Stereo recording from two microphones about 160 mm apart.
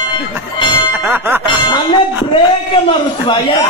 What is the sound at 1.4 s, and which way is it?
Music, 30° left (ahead or behind).